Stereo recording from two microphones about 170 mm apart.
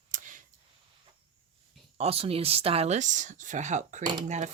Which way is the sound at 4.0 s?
25° right (ahead or behind).